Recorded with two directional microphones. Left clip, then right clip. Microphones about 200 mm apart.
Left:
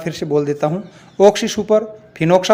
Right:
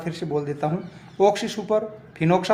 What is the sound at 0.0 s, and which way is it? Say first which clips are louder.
A man's voice: left 9 dB; 35° left (ahead or behind).